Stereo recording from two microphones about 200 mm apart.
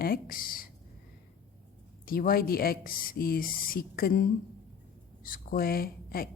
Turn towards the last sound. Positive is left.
turn(degrees=50)  # may be behind; listen again after turning